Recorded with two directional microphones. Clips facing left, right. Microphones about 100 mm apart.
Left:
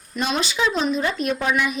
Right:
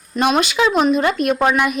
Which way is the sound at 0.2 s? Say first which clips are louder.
Right 7 dB; 60° right (ahead or behind).